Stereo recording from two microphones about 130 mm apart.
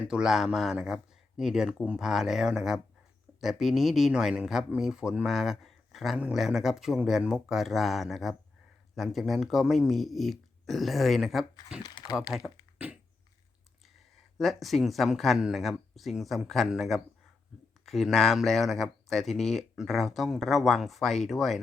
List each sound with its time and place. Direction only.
0.0 s speech: 5° right (ahead or behind)
11.8 s speech: 30° left (ahead or behind)
14.3 s speech: centre (ahead or behind)